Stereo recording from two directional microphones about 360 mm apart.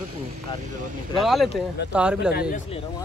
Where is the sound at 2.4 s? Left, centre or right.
Left.